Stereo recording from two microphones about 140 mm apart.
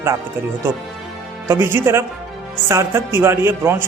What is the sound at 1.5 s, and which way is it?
A man's voice, 20° right (ahead or behind).